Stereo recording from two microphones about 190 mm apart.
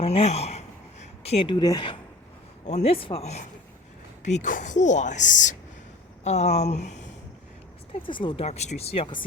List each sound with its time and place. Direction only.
0.0 s speech: 30° left (ahead or behind)
2.6 s a woman's voice: 35° left (ahead or behind)
8.0 s speech: 25° left (ahead or behind)